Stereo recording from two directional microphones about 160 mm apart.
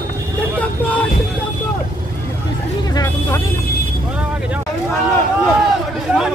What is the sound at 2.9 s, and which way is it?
Speech, 20° left (ahead or behind).